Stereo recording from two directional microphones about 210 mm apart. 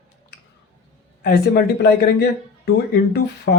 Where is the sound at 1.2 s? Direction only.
45° left (ahead or behind).